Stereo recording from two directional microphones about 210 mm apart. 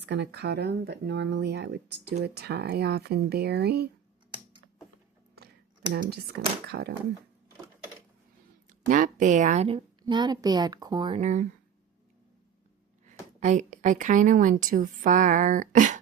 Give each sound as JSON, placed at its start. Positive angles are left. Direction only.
{"t": 0.0, "sound": "speech", "side_deg": -55}
{"t": 5.9, "sound": "speech", "side_deg": -55}
{"t": 8.9, "sound": "a woman's voice", "side_deg": -40}
{"t": 13.1, "sound": "a woman's voice", "side_deg": -35}